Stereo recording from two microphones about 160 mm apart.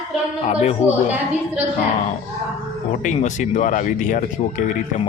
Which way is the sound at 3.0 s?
50° left (ahead or behind).